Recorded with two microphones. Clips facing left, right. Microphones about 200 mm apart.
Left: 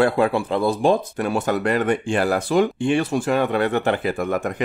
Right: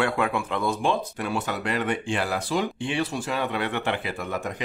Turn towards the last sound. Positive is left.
turn(degrees=55)  # may be behind; listen again after turning